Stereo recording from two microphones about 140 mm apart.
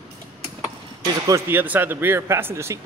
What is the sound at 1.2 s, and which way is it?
Speech, 20° right (ahead or behind).